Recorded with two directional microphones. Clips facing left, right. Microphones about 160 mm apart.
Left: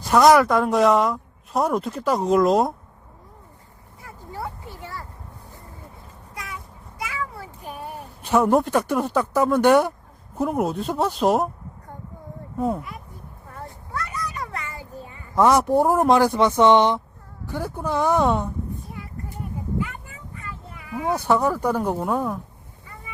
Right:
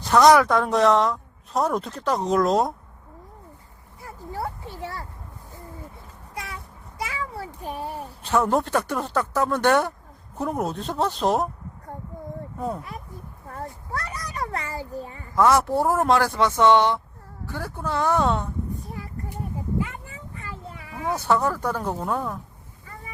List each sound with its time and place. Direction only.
0.0 s a woman's voice: 5° left (ahead or behind)
4.0 s a sound: 35° right (ahead or behind)
6.3 s vehicle: 30° right (ahead or behind)
7.0 s children playing: 30° right (ahead or behind)
7.7 s a sound: 30° right (ahead or behind)
8.2 s speech: 10° left (ahead or behind)
12.5 s speech: 5° left (ahead or behind)
13.5 s a sound: 35° right (ahead or behind)
15.4 s speech: 15° left (ahead or behind)
19.8 s vehicle: 30° right (ahead or behind)
21.0 s speech: 15° left (ahead or behind)